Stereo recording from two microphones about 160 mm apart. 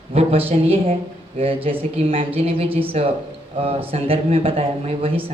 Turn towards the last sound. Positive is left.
turn(degrees=-40)  # may be behind; listen again after turning